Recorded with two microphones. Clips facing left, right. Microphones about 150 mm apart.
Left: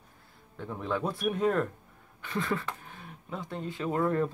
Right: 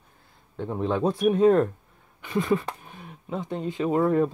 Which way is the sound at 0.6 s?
30° right (ahead or behind).